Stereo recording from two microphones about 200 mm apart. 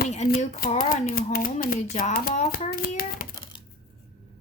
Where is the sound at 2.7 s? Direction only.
45° left (ahead or behind).